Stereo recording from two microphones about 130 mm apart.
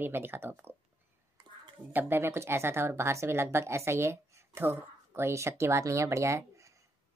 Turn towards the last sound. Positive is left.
turn(degrees=-25)  # may be behind; listen again after turning